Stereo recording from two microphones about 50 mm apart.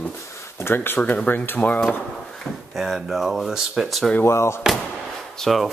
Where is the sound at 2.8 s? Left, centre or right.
Centre.